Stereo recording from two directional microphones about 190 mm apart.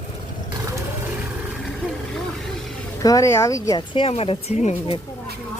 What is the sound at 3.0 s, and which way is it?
Speech, 15° left (ahead or behind).